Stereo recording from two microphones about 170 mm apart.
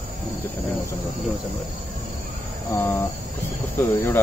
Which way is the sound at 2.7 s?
15° left (ahead or behind).